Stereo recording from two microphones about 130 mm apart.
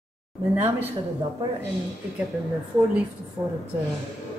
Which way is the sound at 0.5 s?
15° right (ahead or behind).